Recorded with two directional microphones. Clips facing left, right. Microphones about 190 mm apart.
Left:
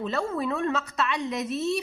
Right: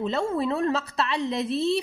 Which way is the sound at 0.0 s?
25° right (ahead or behind).